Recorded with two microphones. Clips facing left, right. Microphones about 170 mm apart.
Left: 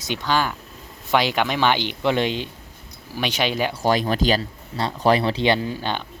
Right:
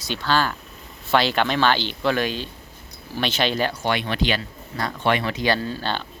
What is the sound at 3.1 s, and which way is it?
Speech, 10° left (ahead or behind).